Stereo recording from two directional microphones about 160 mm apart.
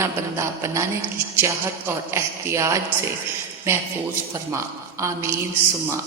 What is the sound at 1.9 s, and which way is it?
A woman's voice, 15° right (ahead or behind).